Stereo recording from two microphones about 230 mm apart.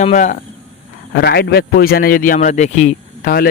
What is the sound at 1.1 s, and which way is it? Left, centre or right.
A man's voice, left.